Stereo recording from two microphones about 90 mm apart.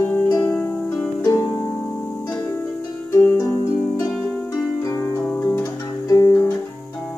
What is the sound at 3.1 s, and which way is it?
Harp, 25° left (ahead or behind).